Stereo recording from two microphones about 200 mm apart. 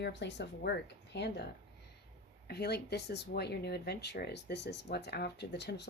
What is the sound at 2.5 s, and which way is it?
Speech, 55° left (ahead or behind).